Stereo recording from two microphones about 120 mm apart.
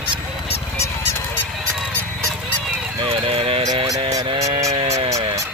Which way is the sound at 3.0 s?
50° right (ahead or behind).